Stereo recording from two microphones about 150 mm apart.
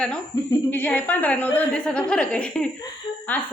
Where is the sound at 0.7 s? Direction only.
10° left (ahead or behind).